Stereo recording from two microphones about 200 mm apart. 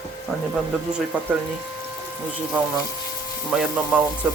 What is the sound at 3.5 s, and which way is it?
Speech, 5° right (ahead or behind).